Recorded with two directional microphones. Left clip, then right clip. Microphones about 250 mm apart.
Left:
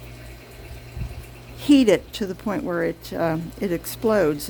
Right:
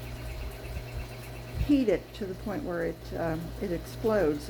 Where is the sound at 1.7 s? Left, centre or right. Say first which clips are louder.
Left 9 dB; left.